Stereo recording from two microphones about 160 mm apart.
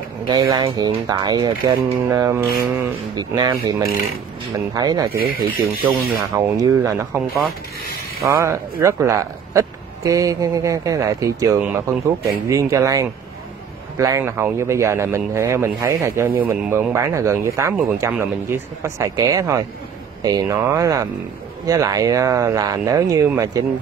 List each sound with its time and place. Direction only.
0.3 s speech: 20° right (ahead or behind)
5.2 s speech: 65° right (ahead or behind)
6.3 s speech: 20° right (ahead or behind)
7.2 s speech: centre (ahead or behind)
8.3 s speech: 20° right (ahead or behind)